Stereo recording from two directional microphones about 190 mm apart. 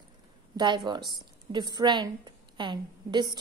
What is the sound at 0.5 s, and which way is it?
A woman's voice, 25° right (ahead or behind).